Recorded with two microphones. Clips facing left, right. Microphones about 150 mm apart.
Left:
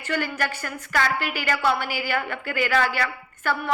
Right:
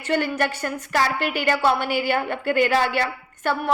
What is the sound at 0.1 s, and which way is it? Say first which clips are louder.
A woman's voice: right 4 dB; 25° right (ahead or behind).